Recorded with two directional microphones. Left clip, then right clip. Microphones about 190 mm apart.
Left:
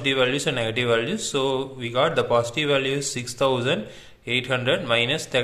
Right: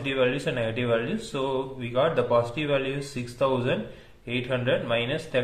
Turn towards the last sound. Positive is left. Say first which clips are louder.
# left 4 dB
turn(degrees=25)  # may be behind; listen again after turning